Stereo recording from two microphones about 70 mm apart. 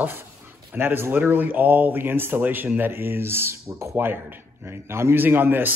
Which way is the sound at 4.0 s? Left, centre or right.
Right.